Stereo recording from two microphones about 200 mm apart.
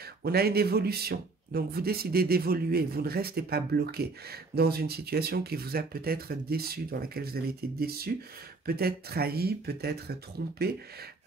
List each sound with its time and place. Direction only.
0.2 s speech: 50° right (ahead or behind)